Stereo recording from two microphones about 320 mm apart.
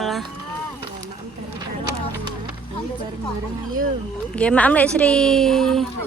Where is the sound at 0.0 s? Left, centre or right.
Centre.